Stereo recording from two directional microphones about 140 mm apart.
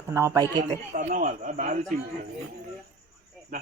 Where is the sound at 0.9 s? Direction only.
70° right (ahead or behind).